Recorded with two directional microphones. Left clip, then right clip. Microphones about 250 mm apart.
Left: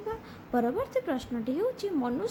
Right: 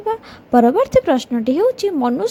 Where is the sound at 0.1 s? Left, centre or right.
Right.